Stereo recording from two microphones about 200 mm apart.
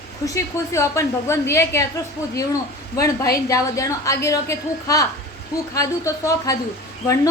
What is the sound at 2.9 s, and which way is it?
A woman's voice, 15° left (ahead or behind).